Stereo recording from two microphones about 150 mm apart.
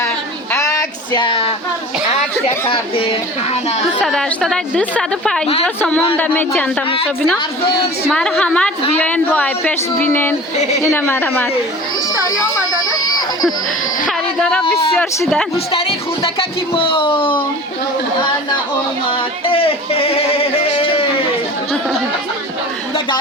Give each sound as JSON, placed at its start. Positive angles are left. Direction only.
{"t": 0.5, "sound": "a sound", "side_deg": 20}
{"t": 1.1, "sound": "speech", "side_deg": 35}
{"t": 4.0, "sound": "a woman's voice", "side_deg": 0}
{"t": 8.1, "sound": "a woman's voice", "side_deg": 5}
{"t": 14.1, "sound": "a sound", "side_deg": 5}
{"t": 15.5, "sound": "speech", "side_deg": 40}
{"t": 19.1, "sound": "speech", "side_deg": 40}